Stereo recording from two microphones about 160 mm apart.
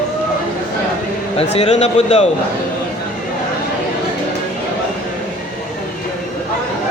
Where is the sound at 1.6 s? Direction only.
45° left (ahead or behind).